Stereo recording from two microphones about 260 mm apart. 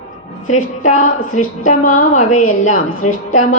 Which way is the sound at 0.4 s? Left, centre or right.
Left.